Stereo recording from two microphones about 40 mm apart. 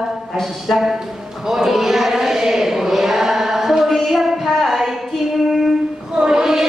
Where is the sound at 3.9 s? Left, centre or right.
Centre.